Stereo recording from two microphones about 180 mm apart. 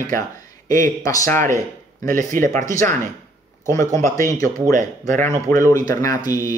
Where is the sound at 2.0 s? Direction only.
45° right (ahead or behind).